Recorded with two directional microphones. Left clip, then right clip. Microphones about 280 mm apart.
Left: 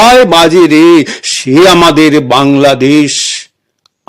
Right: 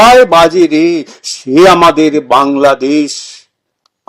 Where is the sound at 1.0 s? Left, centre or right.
Left.